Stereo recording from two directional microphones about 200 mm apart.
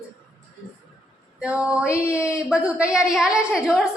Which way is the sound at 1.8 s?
15° left (ahead or behind).